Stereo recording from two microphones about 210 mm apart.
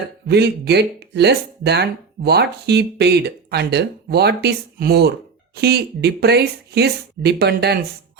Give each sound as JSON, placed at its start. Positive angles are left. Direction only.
{"t": 0.3, "sound": "speech", "side_deg": -50}